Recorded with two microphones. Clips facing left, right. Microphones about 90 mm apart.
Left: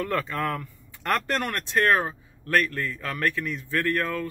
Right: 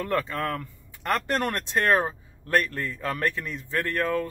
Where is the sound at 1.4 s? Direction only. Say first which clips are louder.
Left 1 dB; 25° right (ahead or behind).